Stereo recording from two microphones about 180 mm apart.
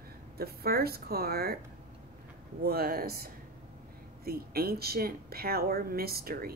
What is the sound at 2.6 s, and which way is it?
Speech, 55° right (ahead or behind).